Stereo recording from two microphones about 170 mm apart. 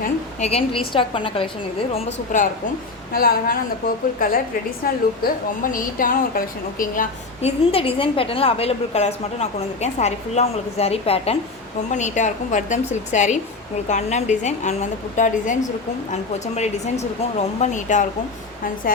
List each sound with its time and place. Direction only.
0.0 s a woman's voice: 40° left (ahead or behind)
2.3 s a woman's voice: 50° left (ahead or behind)
7.7 s a woman's voice: 35° left (ahead or behind)